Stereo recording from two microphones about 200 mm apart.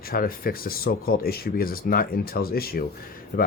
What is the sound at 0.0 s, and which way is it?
Speech, 45° left (ahead or behind).